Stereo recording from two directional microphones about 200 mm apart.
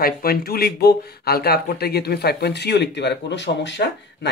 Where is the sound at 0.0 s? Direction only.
50° left (ahead or behind).